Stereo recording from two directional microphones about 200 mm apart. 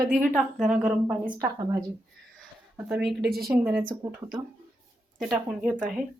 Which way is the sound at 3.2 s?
50° right (ahead or behind).